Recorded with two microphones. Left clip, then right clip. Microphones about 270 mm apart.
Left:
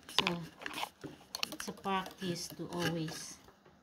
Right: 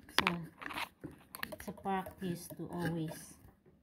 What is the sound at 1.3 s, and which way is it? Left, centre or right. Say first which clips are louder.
Speech: left 5 dB; centre.